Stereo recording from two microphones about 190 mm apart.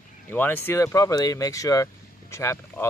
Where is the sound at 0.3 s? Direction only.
10° left (ahead or behind).